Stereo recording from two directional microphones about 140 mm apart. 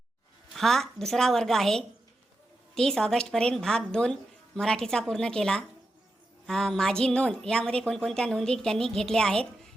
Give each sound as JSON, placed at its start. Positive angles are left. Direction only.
{"t": 0.5, "sound": "a woman's voice", "side_deg": 0}